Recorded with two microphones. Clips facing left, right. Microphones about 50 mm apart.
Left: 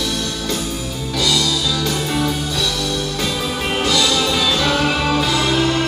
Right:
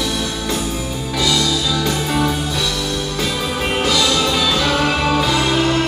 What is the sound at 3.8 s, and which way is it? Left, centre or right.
Music, centre.